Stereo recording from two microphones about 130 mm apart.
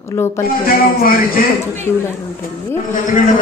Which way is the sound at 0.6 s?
90° left.